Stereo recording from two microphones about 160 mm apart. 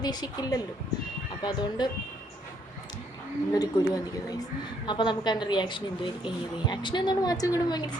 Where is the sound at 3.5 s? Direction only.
25° left (ahead or behind).